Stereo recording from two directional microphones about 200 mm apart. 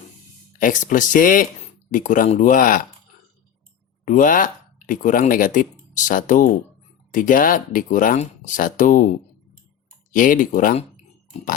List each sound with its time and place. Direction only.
0.6 s speech: 40° left (ahead or behind)
4.0 s speech: 40° left (ahead or behind)
10.1 s speech: 40° left (ahead or behind)